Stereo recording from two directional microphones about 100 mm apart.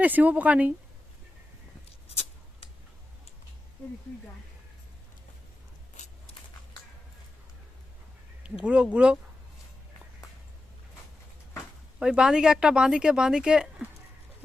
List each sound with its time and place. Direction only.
0.0 s speech: 15° right (ahead or behind)
2.0 s a sound: 90° left
8.6 s speech: 10° right (ahead or behind)
11.9 s speech: 10° right (ahead or behind)